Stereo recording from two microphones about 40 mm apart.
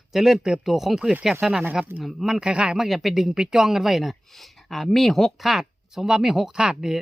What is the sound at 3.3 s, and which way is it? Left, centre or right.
Speech, centre.